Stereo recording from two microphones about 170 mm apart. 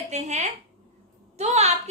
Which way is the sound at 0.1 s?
45° right (ahead or behind).